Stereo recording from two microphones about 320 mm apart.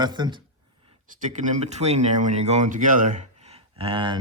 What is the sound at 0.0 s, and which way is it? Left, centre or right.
A man's voice, centre.